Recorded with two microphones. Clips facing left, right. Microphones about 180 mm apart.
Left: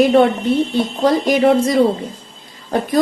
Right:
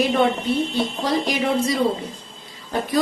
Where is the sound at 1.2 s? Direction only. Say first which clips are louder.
Left 8 dB; 50° left (ahead or behind).